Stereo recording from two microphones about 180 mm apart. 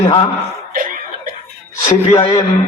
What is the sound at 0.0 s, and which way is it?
Speech, 25° left (ahead or behind).